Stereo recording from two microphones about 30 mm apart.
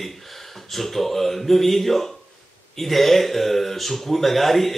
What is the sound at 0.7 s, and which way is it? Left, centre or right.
Speech, centre.